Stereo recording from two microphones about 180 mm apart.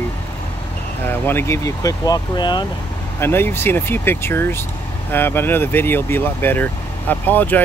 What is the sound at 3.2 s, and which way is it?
Speech, 10° left (ahead or behind).